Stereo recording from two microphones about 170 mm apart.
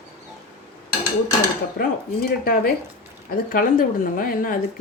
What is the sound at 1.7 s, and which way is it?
Speech, 65° left (ahead or behind).